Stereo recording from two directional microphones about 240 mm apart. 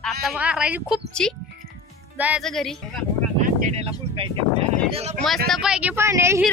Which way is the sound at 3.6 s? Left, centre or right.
Right.